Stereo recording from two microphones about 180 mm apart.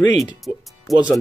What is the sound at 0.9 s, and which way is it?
Speech, centre (ahead or behind).